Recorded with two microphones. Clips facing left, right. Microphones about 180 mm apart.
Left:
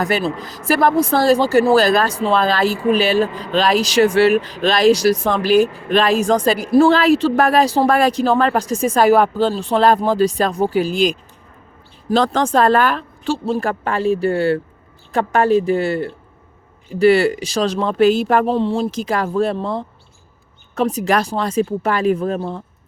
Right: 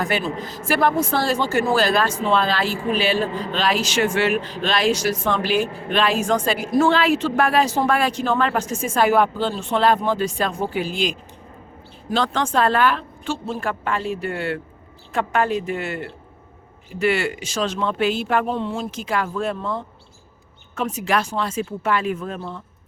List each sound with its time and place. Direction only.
0.0 s speech: 35° left (ahead or behind)